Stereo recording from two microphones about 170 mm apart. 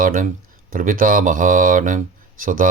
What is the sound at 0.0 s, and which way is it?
Speech, 50° right (ahead or behind).